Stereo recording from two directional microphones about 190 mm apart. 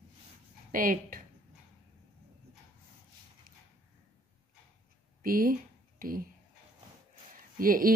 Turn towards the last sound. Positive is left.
turn(degrees=-50)  # may be behind; listen again after turning